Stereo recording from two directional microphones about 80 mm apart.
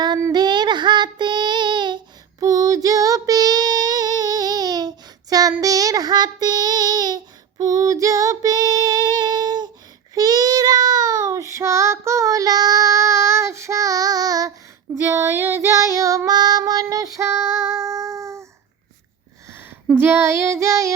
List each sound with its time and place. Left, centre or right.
0.3 s child singing: right
2.4 s child singing: right
7.6 s female singing: right
10.2 s child singing: right
14.9 s female singing: right
19.5 s a sound: right
20.0 s child singing: right